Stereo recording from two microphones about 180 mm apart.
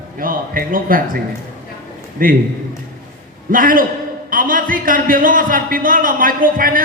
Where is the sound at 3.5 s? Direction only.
50° right (ahead or behind).